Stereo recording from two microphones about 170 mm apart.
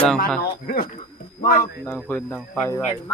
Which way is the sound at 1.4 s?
55° left (ahead or behind).